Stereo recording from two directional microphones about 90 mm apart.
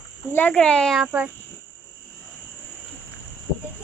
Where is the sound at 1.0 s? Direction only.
15° right (ahead or behind).